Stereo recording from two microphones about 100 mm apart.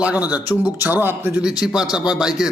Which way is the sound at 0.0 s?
15° right (ahead or behind).